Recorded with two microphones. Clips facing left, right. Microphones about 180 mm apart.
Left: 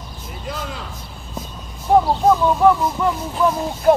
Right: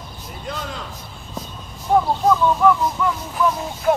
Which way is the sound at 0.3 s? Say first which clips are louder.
Left 1 dB; 5° left (ahead or behind).